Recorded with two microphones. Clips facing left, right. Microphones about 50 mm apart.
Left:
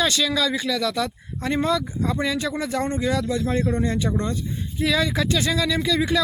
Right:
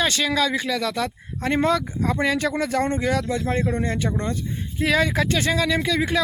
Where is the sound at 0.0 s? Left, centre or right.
Right.